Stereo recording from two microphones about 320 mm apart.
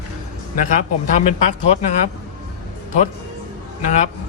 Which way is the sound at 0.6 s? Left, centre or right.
Left.